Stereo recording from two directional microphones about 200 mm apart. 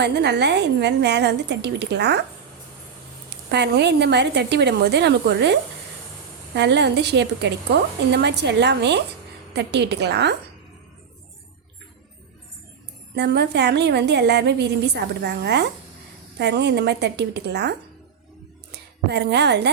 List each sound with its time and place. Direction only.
0.0 s a woman's voice: 55° right (ahead or behind)
3.5 s a woman's voice: 60° right (ahead or behind)
13.1 s a woman's voice: 55° right (ahead or behind)